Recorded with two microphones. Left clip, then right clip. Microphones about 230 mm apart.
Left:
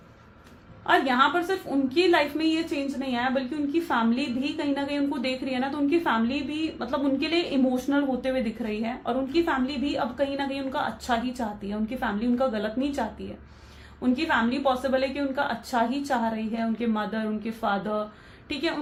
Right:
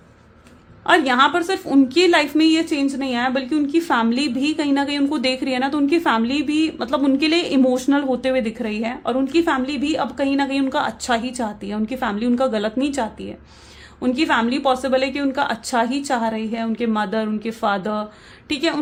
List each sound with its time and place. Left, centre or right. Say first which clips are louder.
0.9 s a woman's voice: right 6 dB; right